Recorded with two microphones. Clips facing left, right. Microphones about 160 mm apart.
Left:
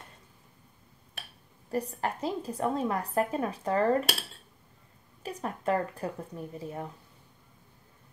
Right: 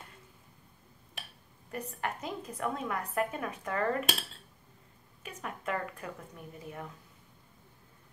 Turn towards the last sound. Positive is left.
turn(degrees=30)  # may be behind; listen again after turning